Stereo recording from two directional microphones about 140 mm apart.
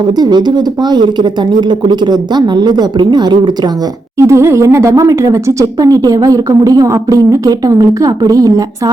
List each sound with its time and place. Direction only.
0.1 s a woman's voice: 30° right (ahead or behind)
4.2 s speech: 20° right (ahead or behind)